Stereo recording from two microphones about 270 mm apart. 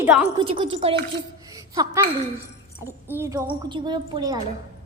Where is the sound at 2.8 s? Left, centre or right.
Centre.